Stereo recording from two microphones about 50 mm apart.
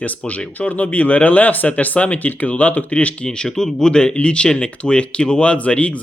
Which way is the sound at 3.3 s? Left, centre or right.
Centre.